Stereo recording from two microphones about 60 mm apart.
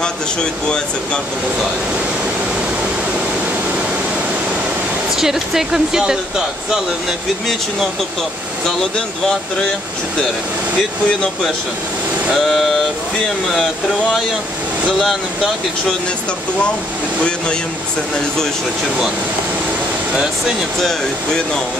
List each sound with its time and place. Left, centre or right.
0.7 s speech: centre
5.1 s speech: centre
12.3 s speech: centre
14.9 s speech: centre